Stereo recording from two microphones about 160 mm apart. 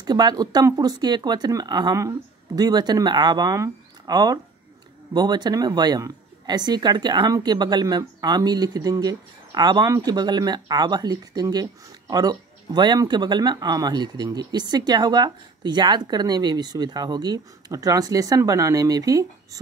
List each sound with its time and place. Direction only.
0.0 s speech: 25° right (ahead or behind)